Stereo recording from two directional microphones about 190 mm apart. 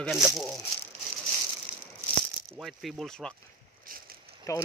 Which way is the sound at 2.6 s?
Centre (ahead or behind).